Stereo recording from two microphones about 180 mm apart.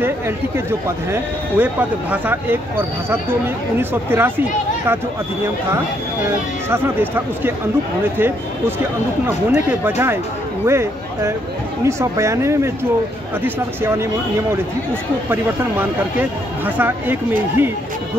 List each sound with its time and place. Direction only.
0.7 s speech: 10° right (ahead or behind)
6.7 s speech: 10° right (ahead or behind)
16.2 s speech: 10° right (ahead or behind)